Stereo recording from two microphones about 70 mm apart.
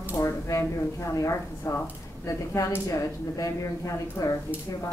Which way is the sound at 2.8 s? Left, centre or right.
Left.